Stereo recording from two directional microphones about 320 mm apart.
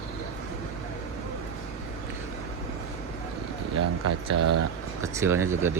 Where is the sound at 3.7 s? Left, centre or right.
Right.